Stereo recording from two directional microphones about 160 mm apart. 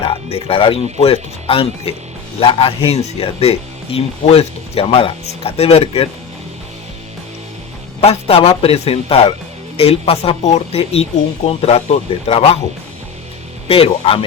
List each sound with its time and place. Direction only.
0.0 s speech: 35° left (ahead or behind)
8.0 s speech: 40° left (ahead or behind)
13.7 s speech: 35° left (ahead or behind)